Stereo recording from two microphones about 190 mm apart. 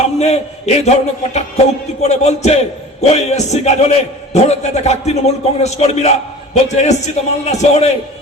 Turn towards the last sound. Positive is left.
turn(degrees=35)  # may be behind; listen again after turning